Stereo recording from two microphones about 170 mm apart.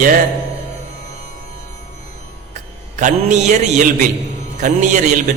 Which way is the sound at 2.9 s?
45° right (ahead or behind).